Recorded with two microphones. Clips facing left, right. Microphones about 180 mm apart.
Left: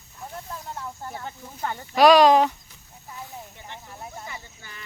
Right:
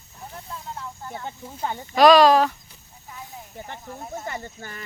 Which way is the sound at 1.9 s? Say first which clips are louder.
Right 1 dB; 10° left (ahead or behind).